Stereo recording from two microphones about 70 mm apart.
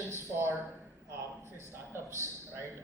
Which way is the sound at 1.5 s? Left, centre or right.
Right.